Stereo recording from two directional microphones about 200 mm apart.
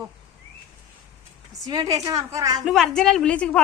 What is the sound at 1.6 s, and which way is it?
A woman's voice, 20° right (ahead or behind).